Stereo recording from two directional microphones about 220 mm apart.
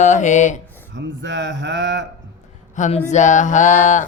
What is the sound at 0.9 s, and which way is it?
Speech, 55° right (ahead or behind).